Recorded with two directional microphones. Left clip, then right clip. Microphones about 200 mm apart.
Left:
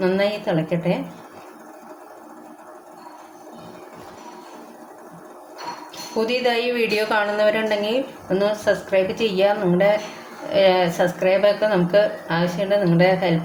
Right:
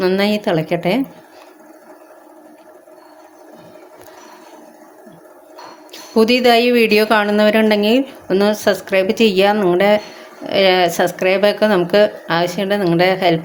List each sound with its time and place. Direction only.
0.0 s speech: 55° right (ahead or behind)
6.1 s a woman's voice: 55° right (ahead or behind)